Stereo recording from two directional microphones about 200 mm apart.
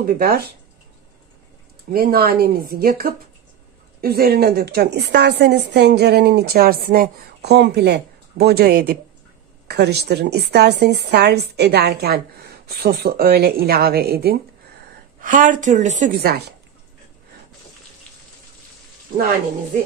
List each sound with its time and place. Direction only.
0.0 s a woman's voice: 45° right (ahead or behind)
1.9 s a woman's voice: 45° right (ahead or behind)
16.1 s a woman's voice: 50° right (ahead or behind)